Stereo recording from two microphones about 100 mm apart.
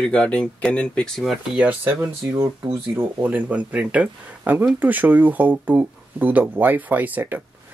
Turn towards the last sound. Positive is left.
turn(degrees=-15)  # may be behind; listen again after turning